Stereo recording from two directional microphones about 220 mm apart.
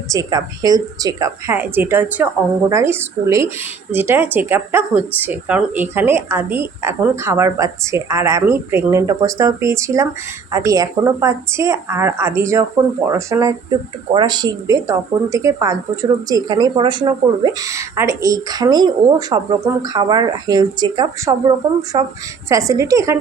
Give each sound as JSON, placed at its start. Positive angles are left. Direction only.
{"t": 0.1, "sound": "a woman's voice", "side_deg": -15}